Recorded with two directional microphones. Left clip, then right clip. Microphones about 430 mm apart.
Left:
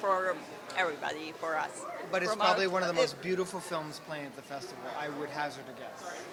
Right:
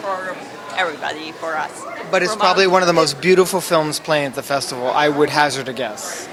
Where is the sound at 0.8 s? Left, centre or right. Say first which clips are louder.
Right 11 dB; centre.